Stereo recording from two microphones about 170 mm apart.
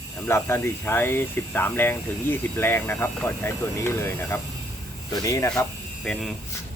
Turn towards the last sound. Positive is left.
turn(degrees=0)  # may be behind; listen again after turning